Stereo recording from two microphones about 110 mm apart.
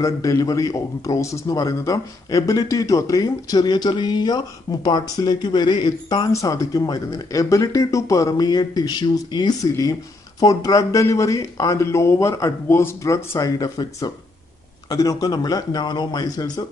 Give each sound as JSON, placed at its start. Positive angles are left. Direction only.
{"t": 0.0, "sound": "speech", "side_deg": 30}